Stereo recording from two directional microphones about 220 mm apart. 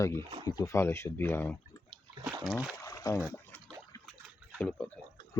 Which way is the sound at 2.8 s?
15° left (ahead or behind).